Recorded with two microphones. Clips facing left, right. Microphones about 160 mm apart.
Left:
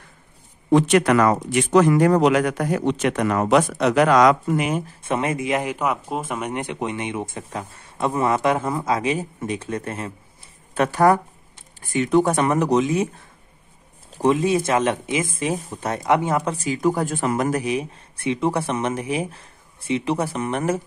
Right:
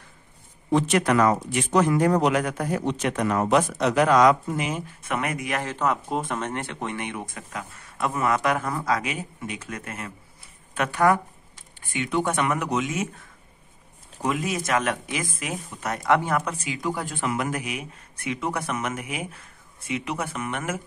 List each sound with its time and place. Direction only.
0.7 s speech: 75° left (ahead or behind); by 4.8 s 60° left (ahead or behind)
4.8 s speech: 25° left (ahead or behind)
14.1 s speech: 30° left (ahead or behind)
16.5 s speech: 40° left (ahead or behind)